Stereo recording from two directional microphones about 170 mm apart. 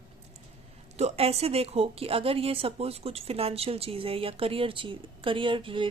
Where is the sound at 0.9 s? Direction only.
40° right (ahead or behind).